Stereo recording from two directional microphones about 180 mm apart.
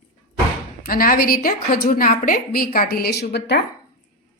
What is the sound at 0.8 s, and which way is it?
A woman's voice, 50° left (ahead or behind).